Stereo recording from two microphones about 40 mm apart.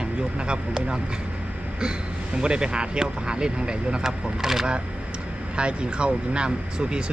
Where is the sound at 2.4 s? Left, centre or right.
Right.